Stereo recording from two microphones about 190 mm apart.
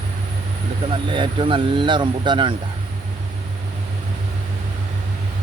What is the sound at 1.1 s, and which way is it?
Speech, 25° right (ahead or behind).